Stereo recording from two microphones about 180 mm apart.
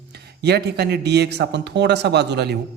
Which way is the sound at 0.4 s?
65° right (ahead or behind).